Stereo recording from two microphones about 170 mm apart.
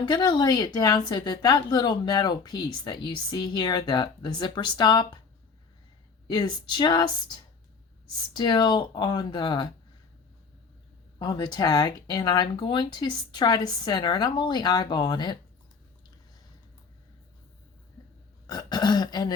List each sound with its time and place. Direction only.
0.0 s a woman's voice: 25° left (ahead or behind)
6.3 s a woman's voice: 25° left (ahead or behind)
11.2 s a woman's voice: 25° left (ahead or behind)
18.4 s a woman's voice: 25° left (ahead or behind)